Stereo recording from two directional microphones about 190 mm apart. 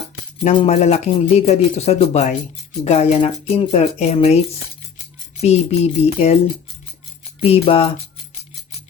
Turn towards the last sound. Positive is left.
turn(degrees=30)  # may be behind; listen again after turning